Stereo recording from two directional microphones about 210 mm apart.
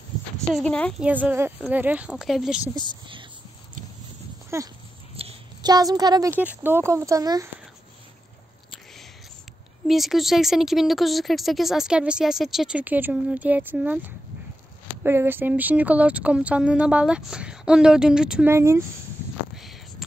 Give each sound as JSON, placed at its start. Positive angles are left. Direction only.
{"t": 0.6, "sound": "speech", "side_deg": 5}
{"t": 1.0, "sound": "speech", "side_deg": -10}
{"t": 2.7, "sound": "speech", "side_deg": -20}
{"t": 4.5, "sound": "speech", "side_deg": -15}
{"t": 5.1, "sound": "speech", "side_deg": -25}
{"t": 9.8, "sound": "speech", "side_deg": 0}